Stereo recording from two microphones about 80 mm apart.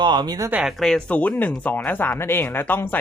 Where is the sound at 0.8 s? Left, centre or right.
Centre.